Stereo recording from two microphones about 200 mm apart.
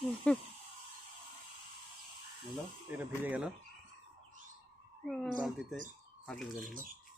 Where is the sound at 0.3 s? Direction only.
5° left (ahead or behind).